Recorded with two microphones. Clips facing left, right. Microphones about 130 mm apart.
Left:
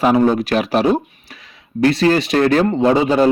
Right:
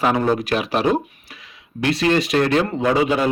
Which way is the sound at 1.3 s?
35° left (ahead or behind).